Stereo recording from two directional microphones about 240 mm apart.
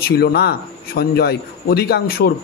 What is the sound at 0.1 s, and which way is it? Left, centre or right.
A man's voice, left.